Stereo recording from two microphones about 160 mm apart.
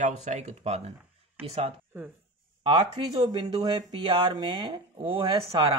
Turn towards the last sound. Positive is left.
turn(degrees=-25)  # may be behind; listen again after turning